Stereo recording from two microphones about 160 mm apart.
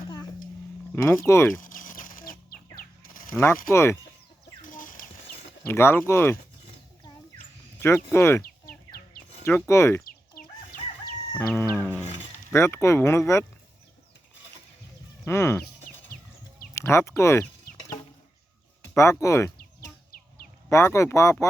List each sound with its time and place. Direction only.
1.0 s speech: 15° left (ahead or behind)
1.5 s chicken: 55° left (ahead or behind)
3.1 s a sound: 60° left (ahead or behind)
3.3 s speech: 15° left (ahead or behind)
4.6 s a sound: 55° left (ahead or behind)
5.6 s speech: 15° left (ahead or behind)
7.8 s speech: 15° left (ahead or behind)
10.1 s chicken: 65° left (ahead or behind)
11.3 s music: 15° left (ahead or behind)
12.5 s speech: 15° left (ahead or behind)
15.2 s speech: 15° left (ahead or behind)
16.7 s speech: 15° left (ahead or behind)
18.9 s speech: 20° left (ahead or behind)
20.7 s speech: 20° left (ahead or behind)